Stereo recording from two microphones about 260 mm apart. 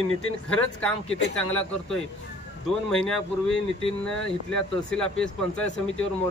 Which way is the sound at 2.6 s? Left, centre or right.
Centre.